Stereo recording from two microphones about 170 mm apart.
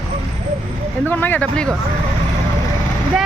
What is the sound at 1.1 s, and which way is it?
Speech, 10° left (ahead or behind).